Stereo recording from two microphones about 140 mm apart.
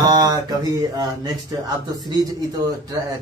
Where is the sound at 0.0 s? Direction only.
30° right (ahead or behind).